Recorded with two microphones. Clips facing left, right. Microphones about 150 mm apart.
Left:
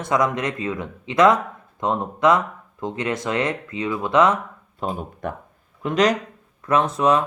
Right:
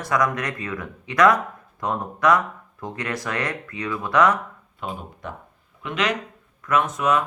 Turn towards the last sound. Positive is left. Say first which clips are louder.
# left 3 dB
turn(degrees=30)  # may be behind; listen again after turning